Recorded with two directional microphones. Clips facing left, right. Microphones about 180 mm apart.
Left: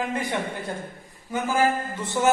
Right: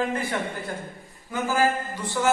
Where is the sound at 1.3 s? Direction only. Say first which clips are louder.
Left 1 dB; 20° left (ahead or behind).